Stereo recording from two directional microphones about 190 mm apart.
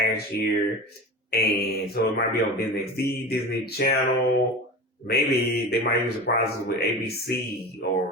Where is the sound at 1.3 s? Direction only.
55° left (ahead or behind).